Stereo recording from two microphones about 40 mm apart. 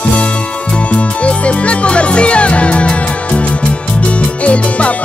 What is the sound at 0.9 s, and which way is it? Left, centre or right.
Music, left.